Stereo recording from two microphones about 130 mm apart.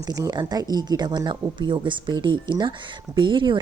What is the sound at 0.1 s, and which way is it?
A woman's voice, 30° right (ahead or behind).